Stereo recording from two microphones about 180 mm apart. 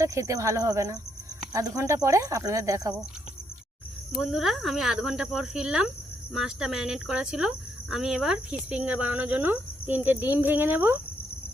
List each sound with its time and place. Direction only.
0.0 s speech: 15° right (ahead or behind)
4.2 s speech: centre (ahead or behind)